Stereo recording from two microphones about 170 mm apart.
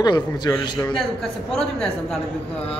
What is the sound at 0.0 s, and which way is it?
Speech, 25° left (ahead or behind).